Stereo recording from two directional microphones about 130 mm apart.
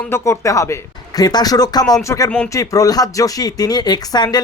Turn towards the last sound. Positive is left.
turn(degrees=30)  # may be behind; listen again after turning